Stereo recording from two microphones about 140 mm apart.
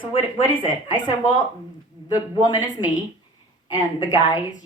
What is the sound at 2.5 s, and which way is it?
Speech, 65° left (ahead or behind).